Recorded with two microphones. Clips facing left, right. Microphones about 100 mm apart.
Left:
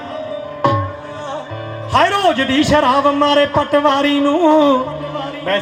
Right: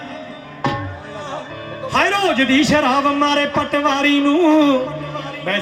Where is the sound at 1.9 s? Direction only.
15° left (ahead or behind).